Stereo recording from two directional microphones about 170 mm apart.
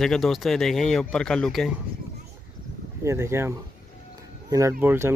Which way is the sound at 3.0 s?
15° right (ahead or behind).